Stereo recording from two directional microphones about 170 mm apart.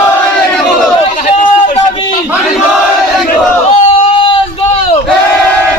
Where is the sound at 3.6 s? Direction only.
35° left (ahead or behind).